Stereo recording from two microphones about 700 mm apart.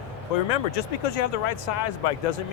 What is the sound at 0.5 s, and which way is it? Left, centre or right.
Speech, left.